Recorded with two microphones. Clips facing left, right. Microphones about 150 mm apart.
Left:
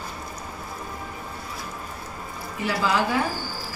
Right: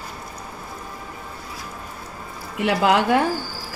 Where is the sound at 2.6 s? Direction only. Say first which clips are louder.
Right 5 dB; 65° right (ahead or behind).